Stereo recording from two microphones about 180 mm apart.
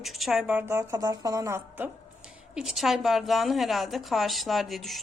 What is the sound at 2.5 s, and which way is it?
A woman's voice, centre (ahead or behind).